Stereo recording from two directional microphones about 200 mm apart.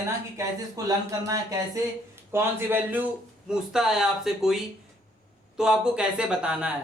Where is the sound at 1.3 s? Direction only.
15° right (ahead or behind); by 4.5 s centre (ahead or behind).